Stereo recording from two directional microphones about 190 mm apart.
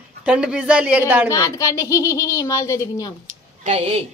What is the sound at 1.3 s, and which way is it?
A child's voice, 15° left (ahead or behind).